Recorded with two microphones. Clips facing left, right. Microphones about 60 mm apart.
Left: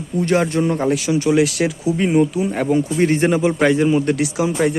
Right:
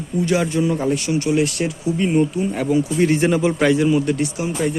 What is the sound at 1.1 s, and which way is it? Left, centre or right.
Speech, left.